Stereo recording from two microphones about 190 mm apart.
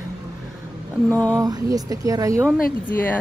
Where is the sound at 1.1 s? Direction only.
5° left (ahead or behind).